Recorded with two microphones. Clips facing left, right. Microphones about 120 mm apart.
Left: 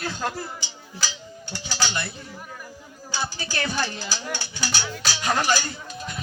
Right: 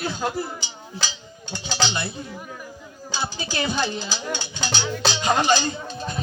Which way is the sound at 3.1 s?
15° right (ahead or behind).